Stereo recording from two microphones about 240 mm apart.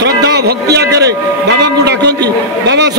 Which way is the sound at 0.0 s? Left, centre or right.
Right.